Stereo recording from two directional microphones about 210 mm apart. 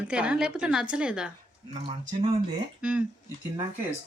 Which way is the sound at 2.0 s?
35° right (ahead or behind).